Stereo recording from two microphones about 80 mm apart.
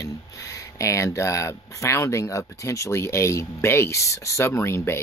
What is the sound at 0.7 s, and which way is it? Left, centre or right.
Speech, left.